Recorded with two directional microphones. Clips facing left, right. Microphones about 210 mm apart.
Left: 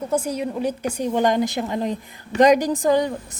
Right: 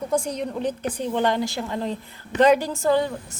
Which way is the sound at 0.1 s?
5° left (ahead or behind).